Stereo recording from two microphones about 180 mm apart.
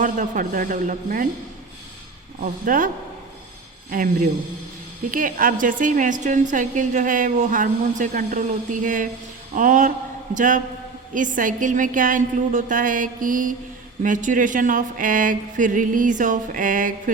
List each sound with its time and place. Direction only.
0.0 s a woman's voice: 45° right (ahead or behind)
2.4 s a woman's voice: 50° right (ahead or behind)
3.9 s a woman's voice: 50° right (ahead or behind)